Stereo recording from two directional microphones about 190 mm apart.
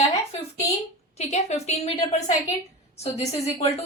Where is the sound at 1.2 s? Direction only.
35° left (ahead or behind).